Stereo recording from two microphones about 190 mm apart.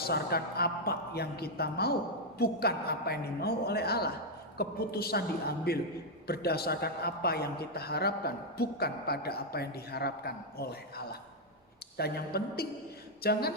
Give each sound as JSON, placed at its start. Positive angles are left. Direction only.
{"t": 0.0, "sound": "a woman's voice", "side_deg": 55}